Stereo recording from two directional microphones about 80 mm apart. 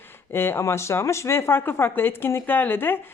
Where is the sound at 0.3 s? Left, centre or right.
Left.